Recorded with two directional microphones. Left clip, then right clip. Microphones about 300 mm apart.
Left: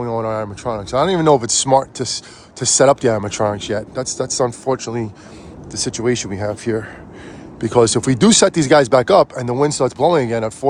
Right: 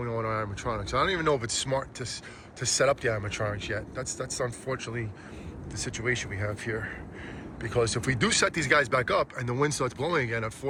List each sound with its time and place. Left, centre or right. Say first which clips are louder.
0.0 s speech: left 10 dB; centre